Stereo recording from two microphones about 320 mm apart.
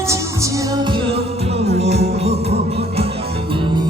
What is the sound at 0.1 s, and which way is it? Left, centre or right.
Music, centre.